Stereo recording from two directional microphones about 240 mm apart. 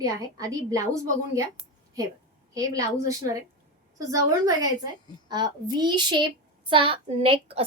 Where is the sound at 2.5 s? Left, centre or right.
Centre.